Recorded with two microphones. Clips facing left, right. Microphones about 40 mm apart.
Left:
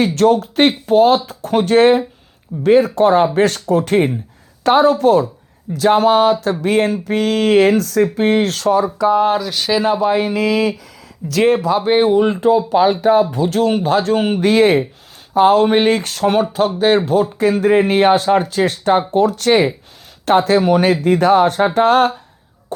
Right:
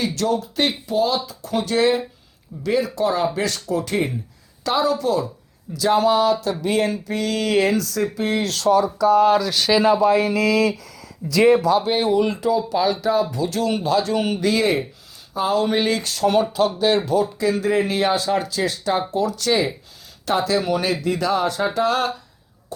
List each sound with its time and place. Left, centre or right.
0.0 s speech: left
9.4 s speech: centre
10.1 s mantra: centre
11.3 s speech: left
11.8 s speech: left